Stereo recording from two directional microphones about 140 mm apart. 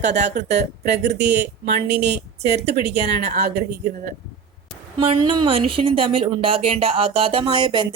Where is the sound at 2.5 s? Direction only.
50° right (ahead or behind).